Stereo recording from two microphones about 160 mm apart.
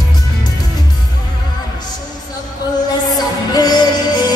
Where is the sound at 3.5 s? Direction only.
25° left (ahead or behind).